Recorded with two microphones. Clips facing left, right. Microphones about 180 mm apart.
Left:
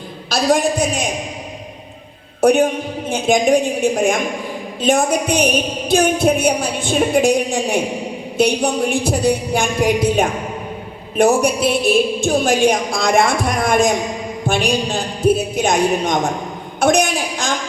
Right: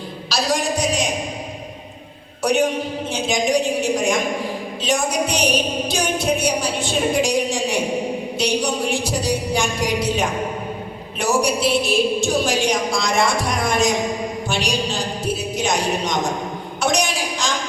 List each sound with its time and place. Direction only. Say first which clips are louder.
0.3 s a woman's voice: left 6 dB; 55° left (ahead or behind)
2.4 s a woman's voice: left 5 dB; 55° left (ahead or behind)